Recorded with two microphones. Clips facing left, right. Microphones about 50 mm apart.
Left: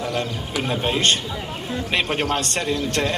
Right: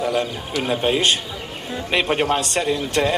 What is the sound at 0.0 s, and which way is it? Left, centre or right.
A man's voice, centre.